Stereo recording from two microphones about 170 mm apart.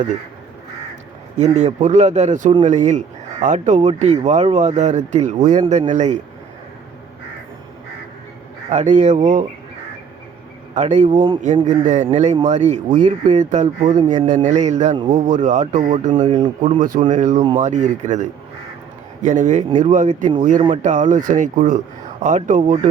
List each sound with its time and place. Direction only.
1.5 s speech: 45° right (ahead or behind)
8.7 s speech: 45° right (ahead or behind)
10.8 s speech: 45° right (ahead or behind)